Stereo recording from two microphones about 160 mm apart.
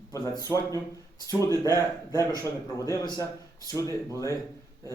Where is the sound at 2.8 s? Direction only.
20° left (ahead or behind).